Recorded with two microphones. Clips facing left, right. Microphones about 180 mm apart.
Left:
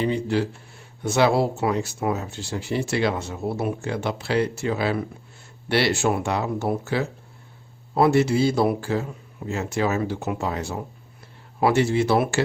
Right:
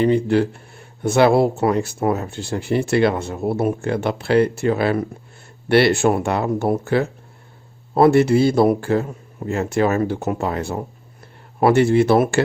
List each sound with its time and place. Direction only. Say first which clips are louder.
0.0 s speech: right 7 dB; 55° right (ahead or behind)